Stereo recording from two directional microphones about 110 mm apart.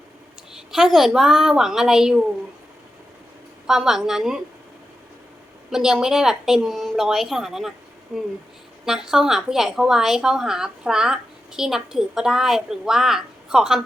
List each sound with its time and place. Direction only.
0.5 s a woman's voice: 5° right (ahead or behind)
3.7 s a woman's voice: 5° right (ahead or behind)
5.7 s a woman's voice: 5° right (ahead or behind)